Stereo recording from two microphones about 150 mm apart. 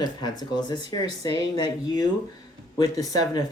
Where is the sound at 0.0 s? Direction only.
30° left (ahead or behind).